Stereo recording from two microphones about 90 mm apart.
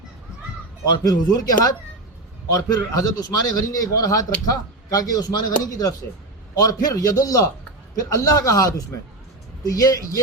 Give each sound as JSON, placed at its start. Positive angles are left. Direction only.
{"t": 0.9, "sound": "a man's voice", "side_deg": 40}
{"t": 2.5, "sound": "a man's voice", "side_deg": 40}